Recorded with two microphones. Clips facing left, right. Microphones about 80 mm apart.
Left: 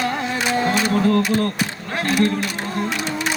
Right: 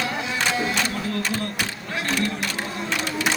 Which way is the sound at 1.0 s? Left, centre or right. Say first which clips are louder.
Left 9 dB; left.